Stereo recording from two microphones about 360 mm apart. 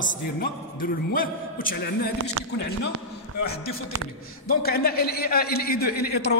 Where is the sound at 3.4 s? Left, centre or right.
Left.